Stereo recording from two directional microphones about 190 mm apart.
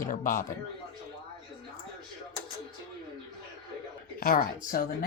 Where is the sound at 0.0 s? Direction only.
45° left (ahead or behind).